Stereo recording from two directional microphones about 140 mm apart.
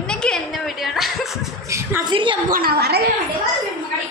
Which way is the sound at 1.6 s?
20° right (ahead or behind).